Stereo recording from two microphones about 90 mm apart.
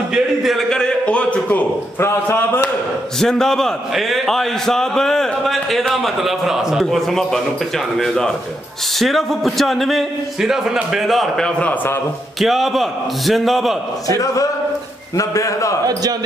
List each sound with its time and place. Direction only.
0.1 s a sound: centre (ahead or behind); by 2.7 s 25° left (ahead or behind)
3.2 s a man's voice: 5° left (ahead or behind)
9.0 s a man's voice: centre (ahead or behind)
14.0 s a man's voice: 40° left (ahead or behind)
15.9 s speech: 45° right (ahead or behind)